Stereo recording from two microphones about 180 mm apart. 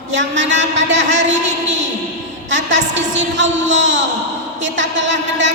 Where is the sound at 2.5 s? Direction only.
90° right.